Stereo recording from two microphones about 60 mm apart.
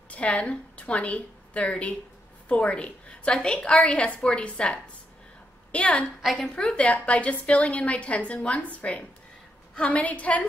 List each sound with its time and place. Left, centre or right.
0.1 s a woman's voice: left
6.2 s a woman's voice: centre
6.5 s a woman's voice: centre